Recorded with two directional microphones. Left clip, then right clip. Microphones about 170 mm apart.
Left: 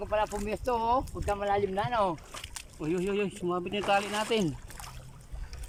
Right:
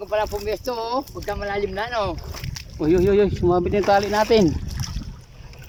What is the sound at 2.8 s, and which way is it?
Speech, 40° right (ahead or behind).